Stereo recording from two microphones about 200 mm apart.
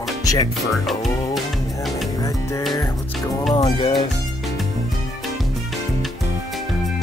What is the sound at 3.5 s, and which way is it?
Speech, 20° left (ahead or behind).